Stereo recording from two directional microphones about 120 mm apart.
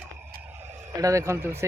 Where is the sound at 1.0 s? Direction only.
25° right (ahead or behind).